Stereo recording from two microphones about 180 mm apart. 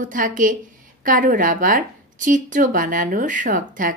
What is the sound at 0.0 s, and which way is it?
Speech, 50° right (ahead or behind).